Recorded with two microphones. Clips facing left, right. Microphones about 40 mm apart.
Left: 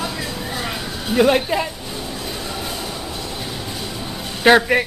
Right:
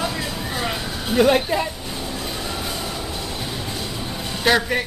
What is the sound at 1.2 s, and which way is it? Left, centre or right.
Speech, centre.